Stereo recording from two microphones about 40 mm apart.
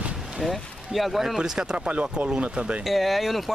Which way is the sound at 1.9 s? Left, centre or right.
Right.